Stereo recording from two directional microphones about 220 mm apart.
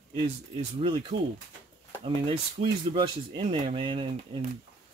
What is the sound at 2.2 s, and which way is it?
Speech, 25° right (ahead or behind).